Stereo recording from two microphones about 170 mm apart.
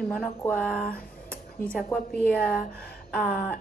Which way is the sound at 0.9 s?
55° left (ahead or behind).